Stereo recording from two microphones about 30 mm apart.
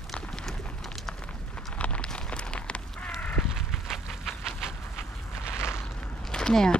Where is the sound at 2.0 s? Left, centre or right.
Left.